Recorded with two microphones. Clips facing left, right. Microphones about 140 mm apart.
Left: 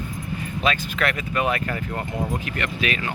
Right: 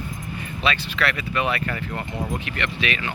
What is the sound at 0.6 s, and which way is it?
Speech, 45° left (ahead or behind).